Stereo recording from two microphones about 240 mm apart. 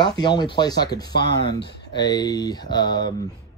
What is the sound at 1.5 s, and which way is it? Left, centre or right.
Speech, left.